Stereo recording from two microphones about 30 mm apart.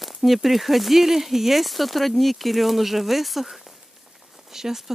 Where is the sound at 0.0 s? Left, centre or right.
Centre.